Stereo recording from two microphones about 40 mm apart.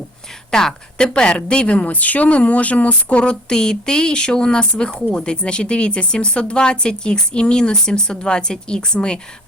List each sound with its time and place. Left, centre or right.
0.5 s speech: centre; by 3.3 s left
3.5 s speech: centre